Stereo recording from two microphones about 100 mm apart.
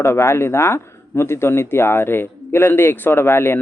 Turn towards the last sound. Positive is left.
turn(degrees=25)  # may be behind; listen again after turning